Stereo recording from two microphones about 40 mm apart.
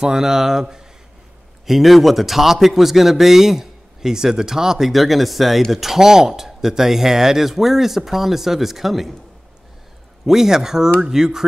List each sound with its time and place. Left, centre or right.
0.0 s a man's voice: centre
1.7 s a man's voice: centre
10.2 s a man's voice: centre